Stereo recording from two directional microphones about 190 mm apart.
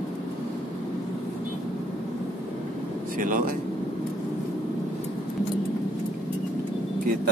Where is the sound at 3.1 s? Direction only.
45° right (ahead or behind).